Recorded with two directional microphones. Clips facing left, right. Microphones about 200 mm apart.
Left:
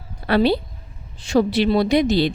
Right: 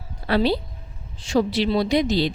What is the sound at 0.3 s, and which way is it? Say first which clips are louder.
A woman's voice: left 3 dB; 60° left (ahead or behind).